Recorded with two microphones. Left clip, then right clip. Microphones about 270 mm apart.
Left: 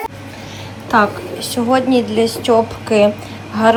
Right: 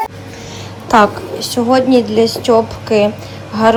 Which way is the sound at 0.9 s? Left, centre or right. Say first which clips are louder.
Right 4 dB; centre.